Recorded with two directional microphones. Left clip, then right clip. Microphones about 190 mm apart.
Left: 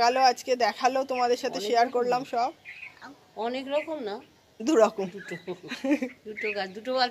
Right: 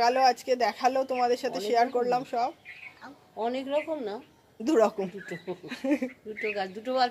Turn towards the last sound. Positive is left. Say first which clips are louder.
# even
turn(degrees=-10)  # may be behind; listen again after turning